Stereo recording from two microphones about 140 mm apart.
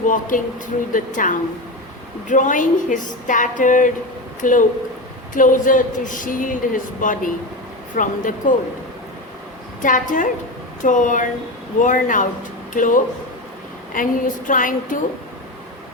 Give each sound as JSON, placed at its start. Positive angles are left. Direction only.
{"t": 0.0, "sound": "speech", "side_deg": 70}
{"t": 9.8, "sound": "speech", "side_deg": 70}